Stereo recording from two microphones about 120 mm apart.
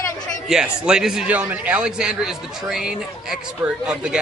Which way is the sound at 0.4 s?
5° right (ahead or behind).